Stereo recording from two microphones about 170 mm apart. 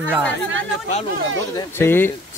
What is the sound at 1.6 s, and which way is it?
Speech, 15° left (ahead or behind).